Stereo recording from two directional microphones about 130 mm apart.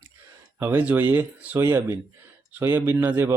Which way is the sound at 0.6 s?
15° right (ahead or behind).